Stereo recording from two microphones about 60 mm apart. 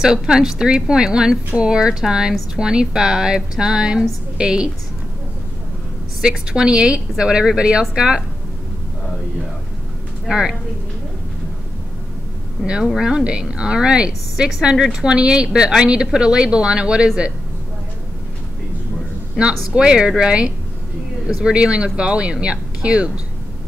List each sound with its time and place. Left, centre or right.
0.0 s a woman's voice: centre
6.2 s a woman's voice: centre
10.2 s speech: centre
12.6 s a woman's voice: centre
19.7 s a woman's voice: centre